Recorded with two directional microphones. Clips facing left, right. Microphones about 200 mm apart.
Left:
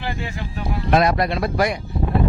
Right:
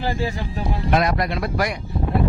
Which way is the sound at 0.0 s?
35° right (ahead or behind).